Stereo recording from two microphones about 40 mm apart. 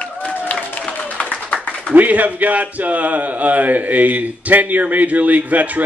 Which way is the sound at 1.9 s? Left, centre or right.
Right.